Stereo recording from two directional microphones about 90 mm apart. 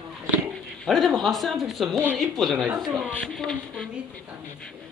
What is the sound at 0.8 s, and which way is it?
Speech, centre (ahead or behind).